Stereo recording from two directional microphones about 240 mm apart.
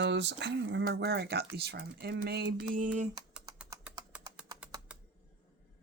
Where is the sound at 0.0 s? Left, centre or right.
Right.